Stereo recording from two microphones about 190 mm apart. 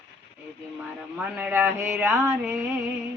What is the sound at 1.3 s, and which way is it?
Speech, 10° right (ahead or behind).